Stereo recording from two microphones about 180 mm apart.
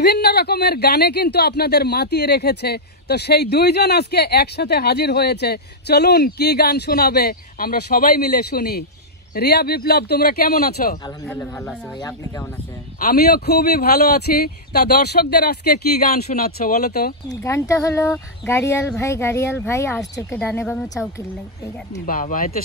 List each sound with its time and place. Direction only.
0.0 s speech: 65° left (ahead or behind)
11.2 s speech: 10° left (ahead or behind)
13.0 s speech: 60° left (ahead or behind)
17.3 s speech: 15° left (ahead or behind)
22.0 s speech: 50° left (ahead or behind)